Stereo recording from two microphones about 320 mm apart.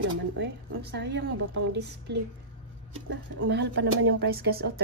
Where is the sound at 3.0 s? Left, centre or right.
Right.